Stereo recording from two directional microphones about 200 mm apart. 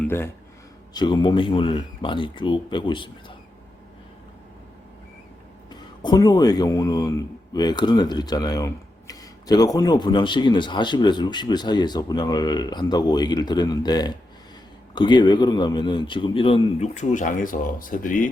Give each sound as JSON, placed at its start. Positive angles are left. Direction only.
{"t": 0.0, "sound": "speech", "side_deg": 10}
{"t": 5.7, "sound": "speech", "side_deg": 20}